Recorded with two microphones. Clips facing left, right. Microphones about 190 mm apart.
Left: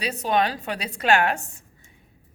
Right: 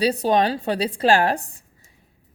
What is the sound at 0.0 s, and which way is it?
Speech, 35° right (ahead or behind).